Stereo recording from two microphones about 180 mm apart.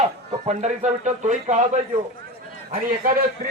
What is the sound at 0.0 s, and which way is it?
A man's voice, 35° right (ahead or behind).